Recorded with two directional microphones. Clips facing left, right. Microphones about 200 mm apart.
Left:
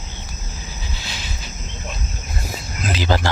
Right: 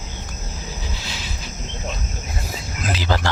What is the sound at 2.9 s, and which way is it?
Speech, 15° left (ahead or behind).